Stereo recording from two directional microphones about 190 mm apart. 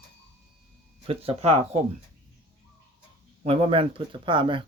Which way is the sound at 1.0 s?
30° right (ahead or behind).